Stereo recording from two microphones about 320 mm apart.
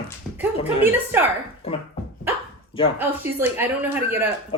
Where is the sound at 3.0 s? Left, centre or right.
Centre.